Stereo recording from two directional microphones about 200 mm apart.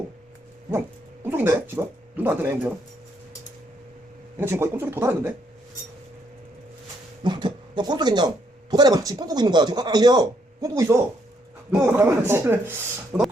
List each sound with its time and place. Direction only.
1.2 s speech: 10° right (ahead or behind)
4.4 s speech: 10° right (ahead or behind)
7.3 s a sound: 20° right (ahead or behind)
8.7 s speech: 20° right (ahead or behind)